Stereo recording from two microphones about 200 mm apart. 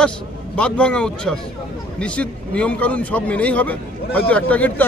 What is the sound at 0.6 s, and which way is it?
A man's voice, 5° left (ahead or behind).